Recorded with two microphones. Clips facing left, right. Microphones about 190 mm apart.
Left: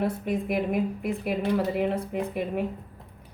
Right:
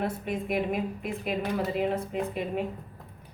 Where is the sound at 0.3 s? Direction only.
55° left (ahead or behind).